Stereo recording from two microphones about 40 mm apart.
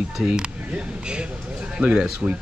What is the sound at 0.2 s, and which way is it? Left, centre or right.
Speech, right.